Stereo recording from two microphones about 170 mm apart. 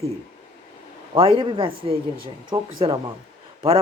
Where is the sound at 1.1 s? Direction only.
30° right (ahead or behind).